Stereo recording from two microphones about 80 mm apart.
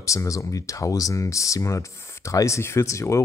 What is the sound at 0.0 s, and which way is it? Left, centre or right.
Speech, left.